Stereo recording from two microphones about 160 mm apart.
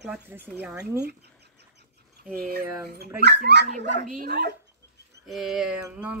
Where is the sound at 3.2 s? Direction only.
90° right.